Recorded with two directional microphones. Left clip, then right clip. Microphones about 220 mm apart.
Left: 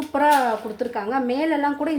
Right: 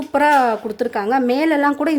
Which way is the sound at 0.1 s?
45° right (ahead or behind).